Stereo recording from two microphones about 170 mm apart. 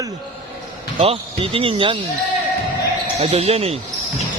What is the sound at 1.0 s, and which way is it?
Speech, 35° right (ahead or behind).